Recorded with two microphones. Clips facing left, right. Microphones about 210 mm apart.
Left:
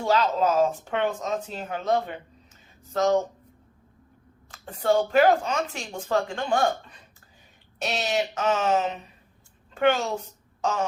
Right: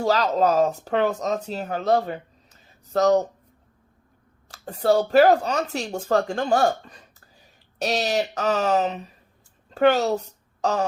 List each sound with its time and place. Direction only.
0.0 s speech: 40° right (ahead or behind)
4.5 s a woman's voice: 40° right (ahead or behind)